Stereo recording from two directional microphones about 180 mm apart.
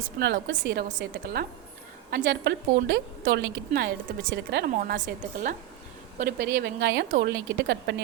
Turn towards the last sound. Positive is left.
turn(degrees=-75)  # may be behind; listen again after turning